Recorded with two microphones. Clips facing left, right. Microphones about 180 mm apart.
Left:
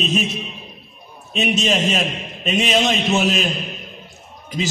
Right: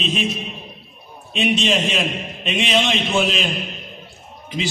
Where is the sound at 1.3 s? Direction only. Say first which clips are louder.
Even; 40° left (ahead or behind).